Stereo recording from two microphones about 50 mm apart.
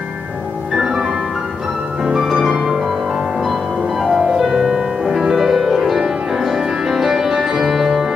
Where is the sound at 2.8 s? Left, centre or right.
Centre.